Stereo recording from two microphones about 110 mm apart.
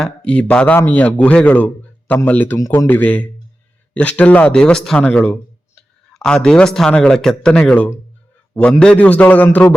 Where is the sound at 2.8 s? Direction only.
15° left (ahead or behind).